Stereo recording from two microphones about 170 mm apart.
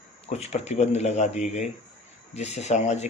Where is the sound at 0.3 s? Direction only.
40° left (ahead or behind).